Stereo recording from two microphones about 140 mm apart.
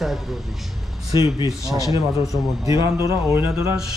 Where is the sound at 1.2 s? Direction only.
25° right (ahead or behind).